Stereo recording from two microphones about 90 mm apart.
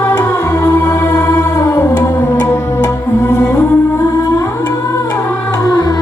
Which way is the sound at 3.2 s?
35° left (ahead or behind).